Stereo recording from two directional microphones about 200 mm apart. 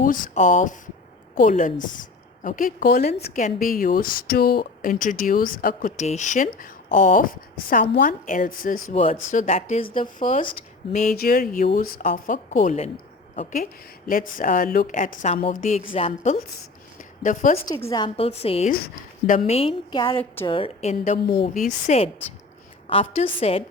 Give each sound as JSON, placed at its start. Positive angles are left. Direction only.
{"t": 0.0, "sound": "a woman's voice", "side_deg": 40}
{"t": 17.0, "sound": "a sound", "side_deg": 40}
{"t": 17.7, "sound": "a woman's voice", "side_deg": 15}